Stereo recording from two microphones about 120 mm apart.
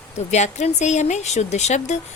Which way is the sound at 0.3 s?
70° left (ahead or behind).